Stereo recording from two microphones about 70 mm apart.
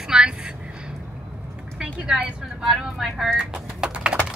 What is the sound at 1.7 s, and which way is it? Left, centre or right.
Vehicle, centre.